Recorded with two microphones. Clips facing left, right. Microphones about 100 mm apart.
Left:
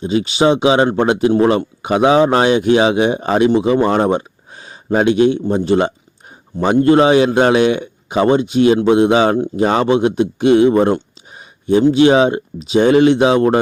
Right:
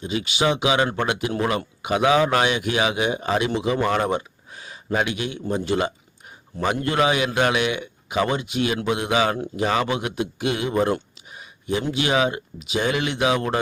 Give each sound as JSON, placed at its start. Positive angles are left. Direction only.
{"t": 0.0, "sound": "speech", "side_deg": 30}